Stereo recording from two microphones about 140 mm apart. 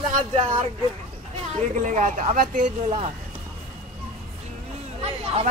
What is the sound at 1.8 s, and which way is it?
Speech, 65° right (ahead or behind).